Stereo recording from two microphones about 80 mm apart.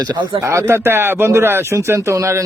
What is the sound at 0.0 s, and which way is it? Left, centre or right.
Speech, right.